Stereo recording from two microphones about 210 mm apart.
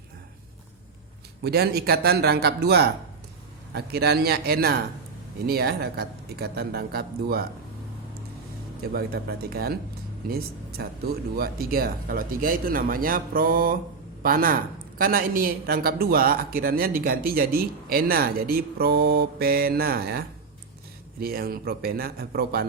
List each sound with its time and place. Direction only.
1.5 s speech: 50° right (ahead or behind)
8.8 s speech: 50° right (ahead or behind)